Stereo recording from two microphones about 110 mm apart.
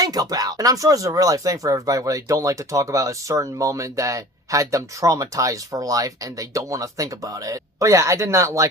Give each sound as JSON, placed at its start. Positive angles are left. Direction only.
{"t": 0.0, "sound": "speech", "side_deg": -35}